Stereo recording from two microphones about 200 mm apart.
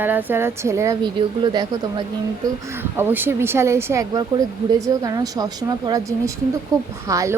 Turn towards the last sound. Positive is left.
turn(degrees=-15)  # may be behind; listen again after turning